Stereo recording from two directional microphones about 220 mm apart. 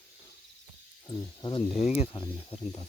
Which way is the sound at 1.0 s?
15° left (ahead or behind).